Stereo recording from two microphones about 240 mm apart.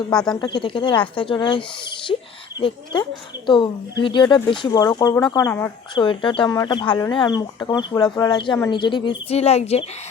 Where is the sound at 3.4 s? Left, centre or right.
Centre.